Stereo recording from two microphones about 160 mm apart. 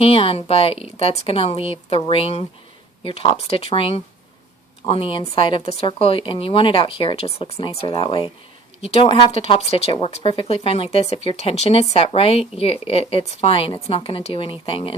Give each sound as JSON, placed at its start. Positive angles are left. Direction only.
{"t": 0.0, "sound": "speech", "side_deg": 35}